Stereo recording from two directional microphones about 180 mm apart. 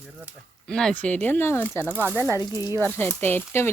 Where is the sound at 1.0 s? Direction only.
10° left (ahead or behind).